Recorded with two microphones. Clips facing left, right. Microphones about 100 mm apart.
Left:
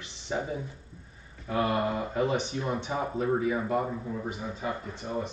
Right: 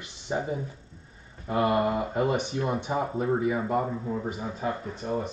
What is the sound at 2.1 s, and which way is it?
Speech, 50° right (ahead or behind).